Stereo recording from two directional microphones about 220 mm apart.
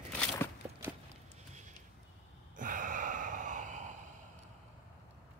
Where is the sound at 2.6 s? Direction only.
35° right (ahead or behind).